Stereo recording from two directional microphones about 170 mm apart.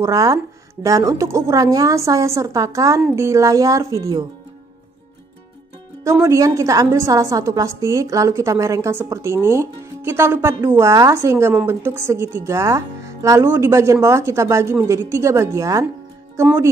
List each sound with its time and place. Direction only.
0.0 s a woman's voice: 20° right (ahead or behind)
6.0 s a woman's voice: 20° right (ahead or behind)